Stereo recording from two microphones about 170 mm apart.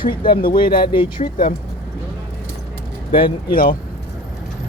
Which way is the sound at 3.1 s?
30° left (ahead or behind).